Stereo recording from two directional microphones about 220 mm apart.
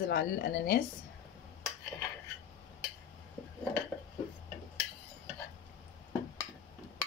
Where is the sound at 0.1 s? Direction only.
45° left (ahead or behind).